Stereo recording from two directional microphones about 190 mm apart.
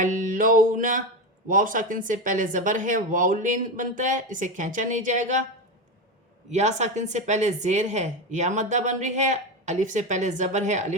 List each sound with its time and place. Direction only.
0.0 s music: 40° right (ahead or behind)
1.5 s speech: 45° right (ahead or behind)
6.5 s speech: 35° right (ahead or behind)